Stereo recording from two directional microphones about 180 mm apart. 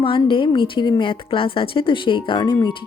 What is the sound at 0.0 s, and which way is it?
A woman's voice, 30° left (ahead or behind).